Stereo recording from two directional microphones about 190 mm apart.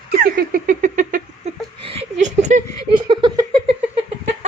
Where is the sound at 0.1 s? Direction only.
55° right (ahead or behind).